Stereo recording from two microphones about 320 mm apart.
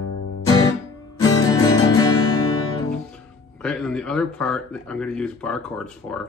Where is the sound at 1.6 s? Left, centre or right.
Centre.